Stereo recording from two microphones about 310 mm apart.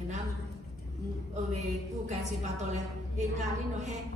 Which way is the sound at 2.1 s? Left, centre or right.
Right.